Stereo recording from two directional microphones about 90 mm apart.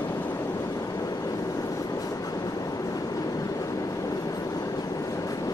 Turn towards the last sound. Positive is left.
turn(degrees=40)  # may be behind; listen again after turning